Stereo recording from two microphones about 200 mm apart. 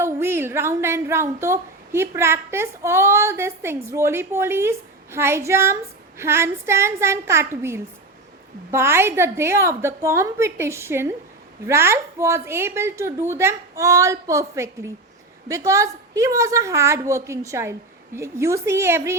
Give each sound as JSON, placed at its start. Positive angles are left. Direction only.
{"t": 0.0, "sound": "speech", "side_deg": -10}